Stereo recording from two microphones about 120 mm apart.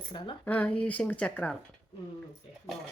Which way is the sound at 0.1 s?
40° left (ahead or behind).